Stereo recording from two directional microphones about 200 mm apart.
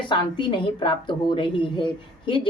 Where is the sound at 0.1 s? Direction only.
25° left (ahead or behind).